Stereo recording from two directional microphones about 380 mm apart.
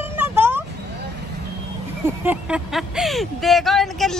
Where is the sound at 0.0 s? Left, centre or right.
Centre.